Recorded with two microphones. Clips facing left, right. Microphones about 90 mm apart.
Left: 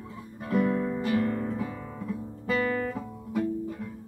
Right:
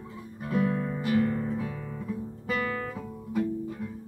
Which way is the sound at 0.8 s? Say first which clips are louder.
Even; 10° right (ahead or behind).